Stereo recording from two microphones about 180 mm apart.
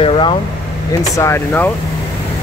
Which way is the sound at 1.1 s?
15° left (ahead or behind).